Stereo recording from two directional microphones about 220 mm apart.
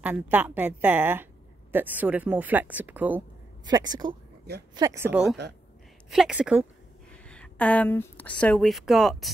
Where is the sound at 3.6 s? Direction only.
20° right (ahead or behind).